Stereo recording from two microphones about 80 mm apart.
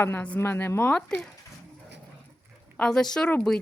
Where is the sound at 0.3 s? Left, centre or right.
Left.